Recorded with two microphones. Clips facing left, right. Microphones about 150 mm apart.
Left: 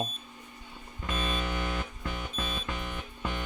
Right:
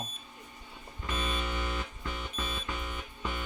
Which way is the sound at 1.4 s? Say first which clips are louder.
Left 2 dB; 50° left (ahead or behind).